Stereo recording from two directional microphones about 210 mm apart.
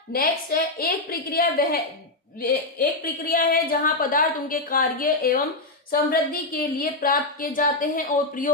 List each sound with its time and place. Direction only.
0.1 s a woman's voice: 45° left (ahead or behind)